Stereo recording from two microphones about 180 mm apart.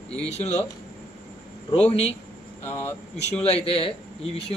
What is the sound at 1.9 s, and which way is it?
Speech, 35° left (ahead or behind).